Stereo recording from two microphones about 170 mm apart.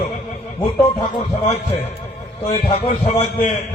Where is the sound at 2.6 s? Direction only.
35° left (ahead or behind).